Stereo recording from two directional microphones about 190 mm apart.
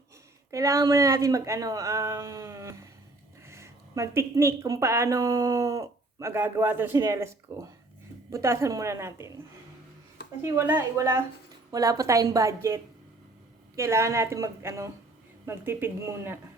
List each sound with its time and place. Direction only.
0.5 s speech: 15° right (ahead or behind)
10.4 s speech: 15° right (ahead or behind)